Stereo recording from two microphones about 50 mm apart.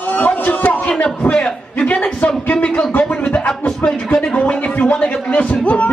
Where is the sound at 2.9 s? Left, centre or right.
Left.